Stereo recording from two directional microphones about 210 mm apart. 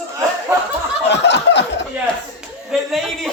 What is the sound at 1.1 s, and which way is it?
Snicker, 55° left (ahead or behind).